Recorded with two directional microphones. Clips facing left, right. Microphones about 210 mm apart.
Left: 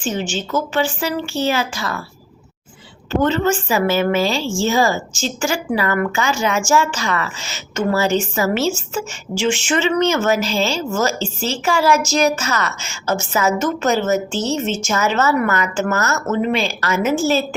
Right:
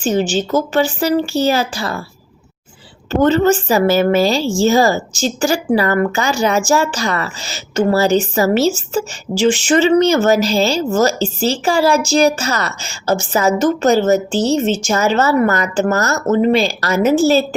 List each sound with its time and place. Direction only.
0.0 s a woman's voice: 40° right (ahead or behind)
3.1 s a woman's voice: 40° right (ahead or behind)